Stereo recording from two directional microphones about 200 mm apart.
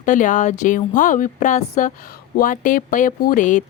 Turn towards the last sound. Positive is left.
turn(degrees=40)  # may be behind; listen again after turning